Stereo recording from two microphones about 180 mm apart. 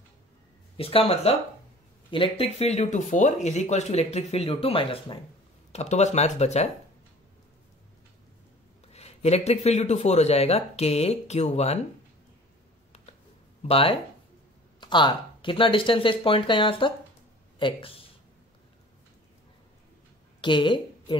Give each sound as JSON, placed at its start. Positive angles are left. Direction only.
{"t": 0.7, "sound": "speech", "side_deg": 30}
{"t": 8.8, "sound": "speech", "side_deg": 35}
{"t": 13.6, "sound": "speech", "side_deg": 35}
{"t": 20.3, "sound": "a woman's voice", "side_deg": 25}